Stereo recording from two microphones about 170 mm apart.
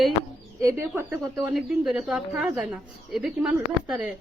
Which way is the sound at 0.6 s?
15° right (ahead or behind).